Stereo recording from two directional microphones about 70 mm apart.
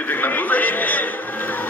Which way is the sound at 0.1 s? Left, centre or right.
Left.